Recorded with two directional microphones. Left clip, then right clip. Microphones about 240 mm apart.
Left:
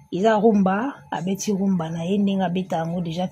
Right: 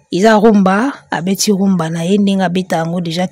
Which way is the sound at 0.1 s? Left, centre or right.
Right.